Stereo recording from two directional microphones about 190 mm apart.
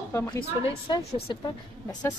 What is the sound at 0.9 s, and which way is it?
Speech, 30° left (ahead or behind).